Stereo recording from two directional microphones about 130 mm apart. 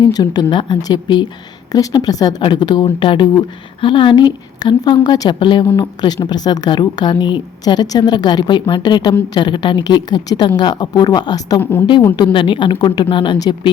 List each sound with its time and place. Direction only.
0.0 s a woman's voice: 30° left (ahead or behind)